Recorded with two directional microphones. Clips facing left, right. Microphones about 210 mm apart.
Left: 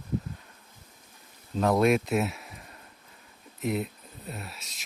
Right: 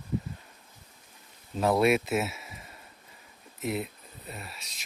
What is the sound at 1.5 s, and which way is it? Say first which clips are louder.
Speech: left 1 dB; 5° right (ahead or behind).